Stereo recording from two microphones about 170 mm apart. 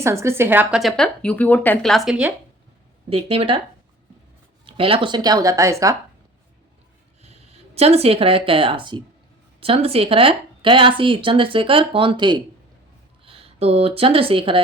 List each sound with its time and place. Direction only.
0.0 s a woman's voice: 15° right (ahead or behind)
3.1 s speech: 35° right (ahead or behind)
4.6 s speech: 35° right (ahead or behind)
7.2 s speech: 40° right (ahead or behind)